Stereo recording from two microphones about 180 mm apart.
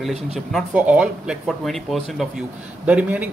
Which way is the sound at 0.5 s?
5° right (ahead or behind).